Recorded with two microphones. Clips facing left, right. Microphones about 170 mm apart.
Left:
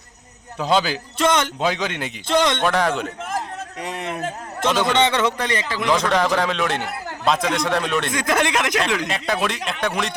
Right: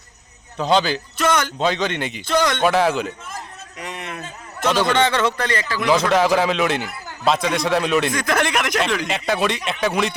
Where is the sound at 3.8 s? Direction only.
30° left (ahead or behind).